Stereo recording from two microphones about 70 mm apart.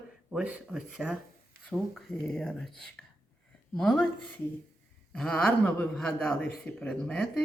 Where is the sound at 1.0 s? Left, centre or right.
Centre.